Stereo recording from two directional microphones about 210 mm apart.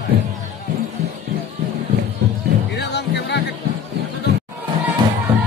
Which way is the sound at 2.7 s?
55° left (ahead or behind).